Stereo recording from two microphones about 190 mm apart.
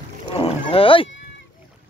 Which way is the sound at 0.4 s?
30° left (ahead or behind).